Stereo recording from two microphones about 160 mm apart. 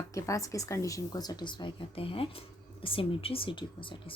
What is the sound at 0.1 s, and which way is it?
A woman's voice, 20° left (ahead or behind).